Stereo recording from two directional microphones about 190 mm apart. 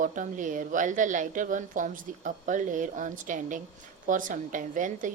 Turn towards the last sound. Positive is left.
turn(degrees=-40)  # may be behind; listen again after turning